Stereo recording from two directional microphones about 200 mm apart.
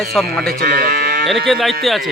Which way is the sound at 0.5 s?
55° right (ahead or behind).